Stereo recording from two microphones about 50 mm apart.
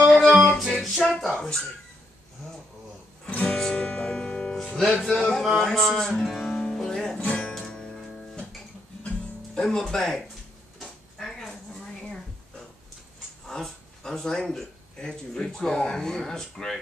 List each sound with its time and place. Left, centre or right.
0.6 s music: centre
1.1 s speech: centre
3.4 s music: centre
5.0 s a sound: centre
5.4 s speech: centre
6.2 s music: centre
7.2 s music: centre
7.5 s guitar: centre
9.6 s speech: centre
10.8 s a sound: centre
13.5 s speech: centre